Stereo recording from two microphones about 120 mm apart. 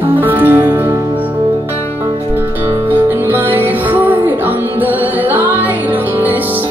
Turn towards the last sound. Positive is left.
turn(degrees=-15)  # may be behind; listen again after turning